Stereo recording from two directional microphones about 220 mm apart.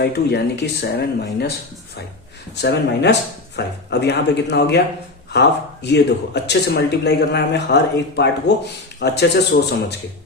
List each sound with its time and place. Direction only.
0.0 s speech: 50° left (ahead or behind)
2.6 s speech: 50° left (ahead or behind)